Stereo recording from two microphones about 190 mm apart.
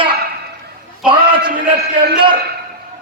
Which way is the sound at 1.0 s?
25° right (ahead or behind).